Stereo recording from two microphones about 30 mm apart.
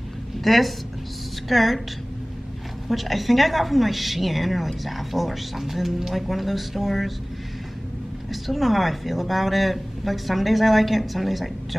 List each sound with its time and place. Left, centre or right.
0.4 s a woman's voice: centre
2.9 s a woman's voice: centre
8.3 s a woman's voice: centre